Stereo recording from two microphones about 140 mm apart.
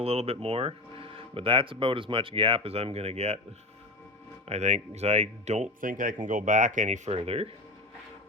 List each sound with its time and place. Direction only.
0.0 s speech: 45° right (ahead or behind)
4.4 s speech: 50° right (ahead or behind)
5.8 s speech: 70° right (ahead or behind)
7.2 s speech: 45° right (ahead or behind)